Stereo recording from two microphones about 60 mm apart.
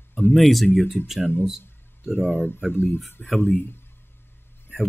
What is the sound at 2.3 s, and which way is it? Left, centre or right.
Speech, left.